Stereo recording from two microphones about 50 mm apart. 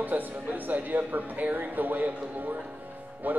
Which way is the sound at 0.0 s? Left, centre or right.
Right.